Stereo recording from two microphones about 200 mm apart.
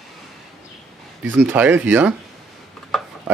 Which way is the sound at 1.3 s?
10° right (ahead or behind).